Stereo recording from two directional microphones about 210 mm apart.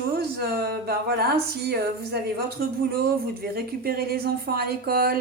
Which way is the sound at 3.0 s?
45° right (ahead or behind).